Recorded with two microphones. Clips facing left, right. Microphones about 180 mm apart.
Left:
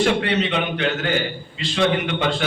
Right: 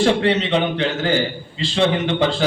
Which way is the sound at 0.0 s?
30° right (ahead or behind).